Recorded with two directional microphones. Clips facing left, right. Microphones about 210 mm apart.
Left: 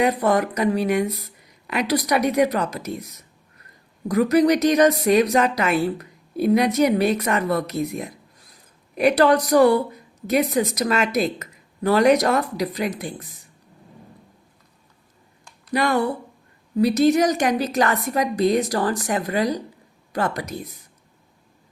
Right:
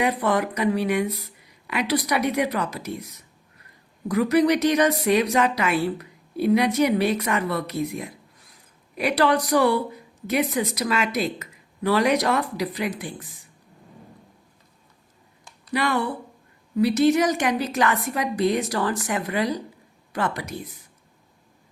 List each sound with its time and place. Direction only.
0.0 s a woman's voice: 45° left (ahead or behind)
4.1 s a woman's voice: 45° left (ahead or behind)
15.7 s a woman's voice: 40° left (ahead or behind)